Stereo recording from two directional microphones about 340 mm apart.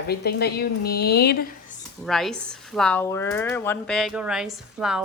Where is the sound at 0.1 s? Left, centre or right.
Left.